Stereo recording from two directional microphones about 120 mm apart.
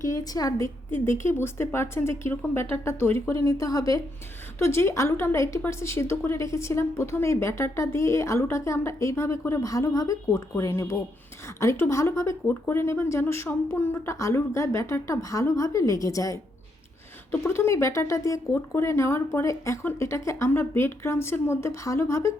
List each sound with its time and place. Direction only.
0.0 s a woman's voice: 30° left (ahead or behind)
0.9 s a woman's voice: 20° left (ahead or behind)
17.5 s a woman's voice: 20° left (ahead or behind)